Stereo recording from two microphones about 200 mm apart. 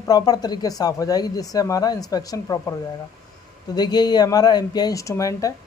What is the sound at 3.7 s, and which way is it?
A man's voice, 20° left (ahead or behind).